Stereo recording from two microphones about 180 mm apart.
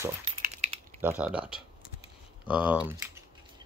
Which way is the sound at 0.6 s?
35° right (ahead or behind).